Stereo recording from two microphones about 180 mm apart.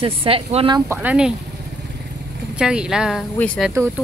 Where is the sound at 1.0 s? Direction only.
5° right (ahead or behind).